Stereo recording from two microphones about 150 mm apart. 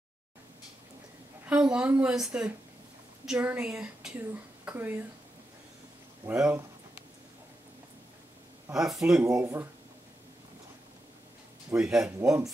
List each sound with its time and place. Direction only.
1.4 s speech: 10° right (ahead or behind)
6.2 s a sound: 10° right (ahead or behind)
8.7 s speech: 5° right (ahead or behind)
9.4 s speech: 15° right (ahead or behind)
11.7 s speech: 5° right (ahead or behind)
12.0 s speech: 20° right (ahead or behind)